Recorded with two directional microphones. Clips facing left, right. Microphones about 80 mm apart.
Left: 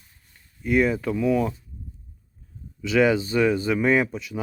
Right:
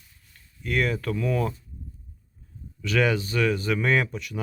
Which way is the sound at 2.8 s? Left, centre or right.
Centre.